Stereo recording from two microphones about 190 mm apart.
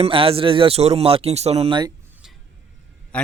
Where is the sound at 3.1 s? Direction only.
5° left (ahead or behind).